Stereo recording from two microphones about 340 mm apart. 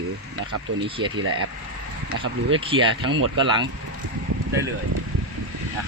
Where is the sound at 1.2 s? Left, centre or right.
Right.